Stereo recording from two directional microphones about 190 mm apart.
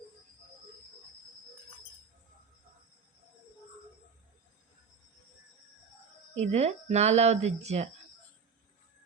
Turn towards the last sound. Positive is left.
turn(degrees=-35)  # may be behind; listen again after turning